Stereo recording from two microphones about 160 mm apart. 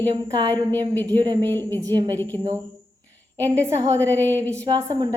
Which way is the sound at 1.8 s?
25° right (ahead or behind).